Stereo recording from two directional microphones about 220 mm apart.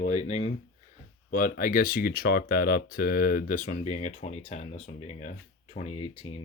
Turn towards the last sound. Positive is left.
turn(degrees=25)  # may be behind; listen again after turning